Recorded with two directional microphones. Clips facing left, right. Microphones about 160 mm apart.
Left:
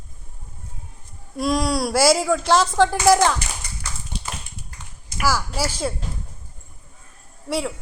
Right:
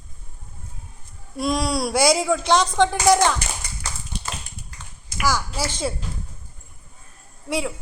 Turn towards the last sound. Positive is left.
turn(degrees=0)  # may be behind; listen again after turning